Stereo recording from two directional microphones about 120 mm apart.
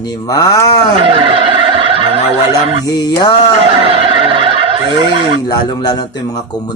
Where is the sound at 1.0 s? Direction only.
45° right (ahead or behind).